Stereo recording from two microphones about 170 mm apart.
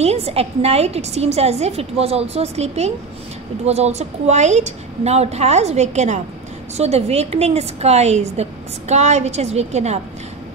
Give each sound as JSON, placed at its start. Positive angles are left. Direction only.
{"t": 0.0, "sound": "a woman's voice", "side_deg": -35}